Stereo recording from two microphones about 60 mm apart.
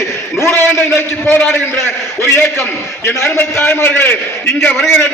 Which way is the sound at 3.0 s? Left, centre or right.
Left.